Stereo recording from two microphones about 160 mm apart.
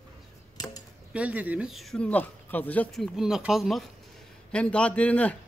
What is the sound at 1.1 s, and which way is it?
Speech, 10° right (ahead or behind).